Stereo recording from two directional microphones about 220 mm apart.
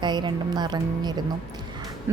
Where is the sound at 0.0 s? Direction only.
20° right (ahead or behind).